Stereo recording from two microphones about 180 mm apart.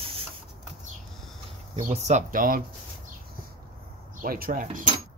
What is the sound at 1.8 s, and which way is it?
Speech, 40° right (ahead or behind).